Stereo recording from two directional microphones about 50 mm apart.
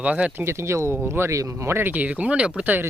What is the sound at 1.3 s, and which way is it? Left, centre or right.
Speech, right.